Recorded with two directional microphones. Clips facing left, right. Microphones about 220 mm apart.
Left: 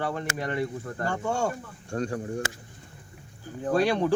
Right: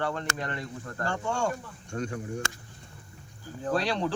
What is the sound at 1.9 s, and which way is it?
Speech, 35° left (ahead or behind).